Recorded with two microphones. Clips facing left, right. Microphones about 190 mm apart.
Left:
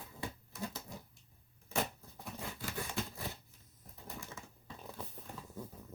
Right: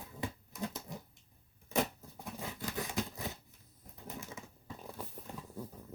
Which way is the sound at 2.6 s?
20° right (ahead or behind).